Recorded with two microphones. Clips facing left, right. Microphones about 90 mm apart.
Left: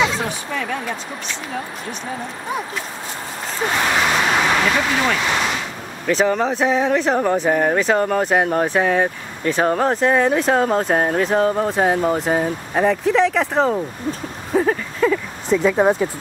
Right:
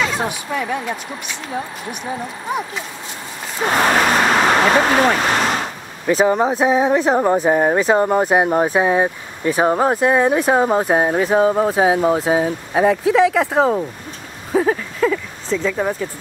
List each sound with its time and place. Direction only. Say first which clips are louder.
0.5 s speech: right 2 dB; 15° right (ahead or behind)
3.7 s vehicle: right 4 dB; 45° right (ahead or behind)
6.2 s speech: right 3 dB; 20° right (ahead or behind)
14.5 s a sound: right 1 dB; centre (ahead or behind)
15.5 s speech: left 4 dB; 20° left (ahead or behind)